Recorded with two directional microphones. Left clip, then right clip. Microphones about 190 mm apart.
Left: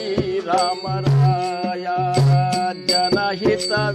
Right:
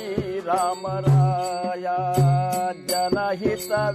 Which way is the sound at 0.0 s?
45° right (ahead or behind).